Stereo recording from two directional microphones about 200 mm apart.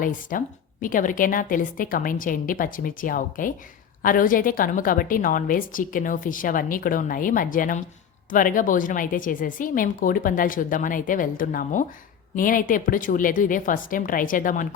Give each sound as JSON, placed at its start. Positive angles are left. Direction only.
{"t": 0.0, "sound": "a woman's voice", "side_deg": 45}